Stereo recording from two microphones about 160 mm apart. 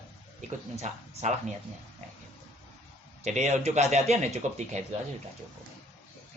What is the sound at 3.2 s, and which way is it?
A man's voice, 45° right (ahead or behind).